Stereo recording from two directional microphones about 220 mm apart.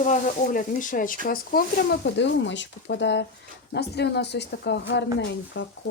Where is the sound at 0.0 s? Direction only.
35° left (ahead or behind); by 5.7 s 50° left (ahead or behind).